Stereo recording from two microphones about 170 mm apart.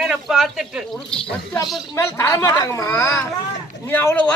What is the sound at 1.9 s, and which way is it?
A man's voice, 15° left (ahead or behind).